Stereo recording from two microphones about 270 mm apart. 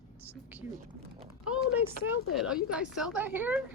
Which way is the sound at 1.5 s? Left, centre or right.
Centre.